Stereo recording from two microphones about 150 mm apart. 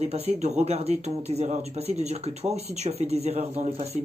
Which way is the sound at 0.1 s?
45° right (ahead or behind).